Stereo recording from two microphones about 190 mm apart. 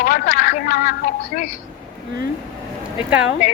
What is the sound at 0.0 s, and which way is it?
A woman's voice, 45° left (ahead or behind).